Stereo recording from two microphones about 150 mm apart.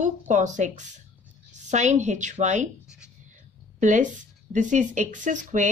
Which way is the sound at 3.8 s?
55° right (ahead or behind).